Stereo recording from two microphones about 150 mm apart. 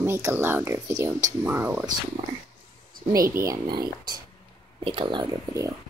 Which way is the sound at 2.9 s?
70° right (ahead or behind).